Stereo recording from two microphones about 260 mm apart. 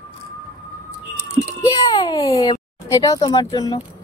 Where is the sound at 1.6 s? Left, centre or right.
Centre.